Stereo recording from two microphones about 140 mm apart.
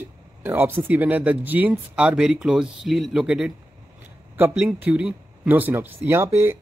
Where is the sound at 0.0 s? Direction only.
15° right (ahead or behind).